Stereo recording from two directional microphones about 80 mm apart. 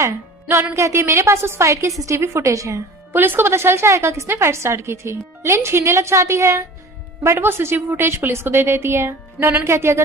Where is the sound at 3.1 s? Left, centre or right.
Right.